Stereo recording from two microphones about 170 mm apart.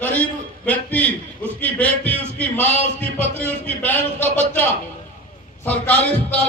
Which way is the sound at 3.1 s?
35° right (ahead or behind).